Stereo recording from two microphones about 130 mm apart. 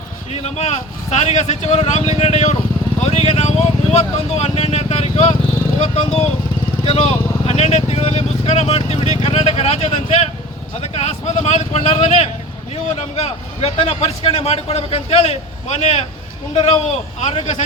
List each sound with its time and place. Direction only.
0.4 s a man's voice: 55° left (ahead or behind)